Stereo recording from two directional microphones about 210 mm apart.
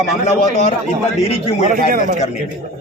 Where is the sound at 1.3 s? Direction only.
30° left (ahead or behind).